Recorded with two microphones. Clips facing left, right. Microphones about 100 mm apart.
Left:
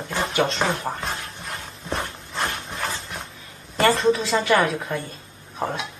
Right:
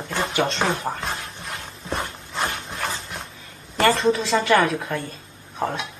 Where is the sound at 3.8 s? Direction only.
Centre (ahead or behind).